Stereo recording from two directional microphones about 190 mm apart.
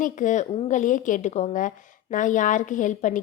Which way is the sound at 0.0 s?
40° left (ahead or behind).